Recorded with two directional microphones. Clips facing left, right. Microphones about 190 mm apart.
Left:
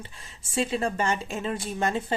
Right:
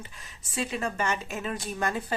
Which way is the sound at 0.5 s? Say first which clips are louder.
Left 4 dB; 30° left (ahead or behind).